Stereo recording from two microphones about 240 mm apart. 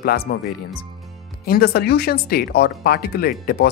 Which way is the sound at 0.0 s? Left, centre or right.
Left.